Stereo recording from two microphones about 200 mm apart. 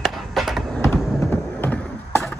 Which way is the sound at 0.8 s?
10° left (ahead or behind).